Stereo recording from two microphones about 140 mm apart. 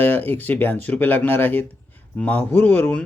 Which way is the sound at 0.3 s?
15° left (ahead or behind).